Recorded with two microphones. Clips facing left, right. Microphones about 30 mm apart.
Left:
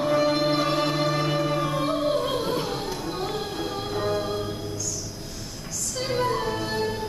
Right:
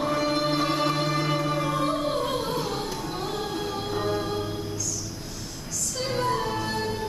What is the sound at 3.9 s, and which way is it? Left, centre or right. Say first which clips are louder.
Music: left 1 dB; centre.